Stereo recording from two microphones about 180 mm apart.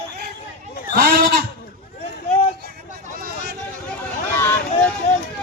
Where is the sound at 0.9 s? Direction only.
55° right (ahead or behind).